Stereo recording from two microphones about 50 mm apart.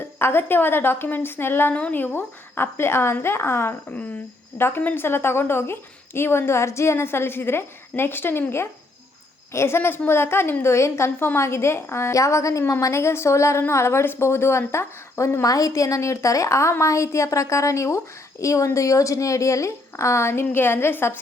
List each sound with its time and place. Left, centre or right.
0.2 s a woman's voice: left
1.7 s speech: left
2.0 s a woman's voice: left
9.5 s a woman's voice: left
10.6 s a woman's voice: left
12.8 s a woman's voice: left
16.8 s a woman's voice: left